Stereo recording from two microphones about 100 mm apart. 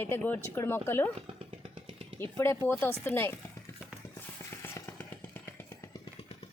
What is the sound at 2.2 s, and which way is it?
Speech, 25° left (ahead or behind).